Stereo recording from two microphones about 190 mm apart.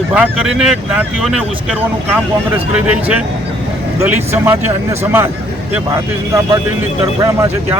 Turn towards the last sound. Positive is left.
turn(degrees=-15)  # may be behind; listen again after turning